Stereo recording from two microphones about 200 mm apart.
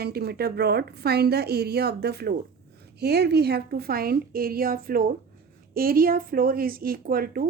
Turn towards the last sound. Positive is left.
turn(degrees=-45)  # may be behind; listen again after turning